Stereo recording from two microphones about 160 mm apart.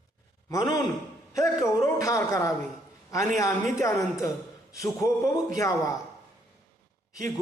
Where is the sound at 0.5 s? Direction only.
25° left (ahead or behind).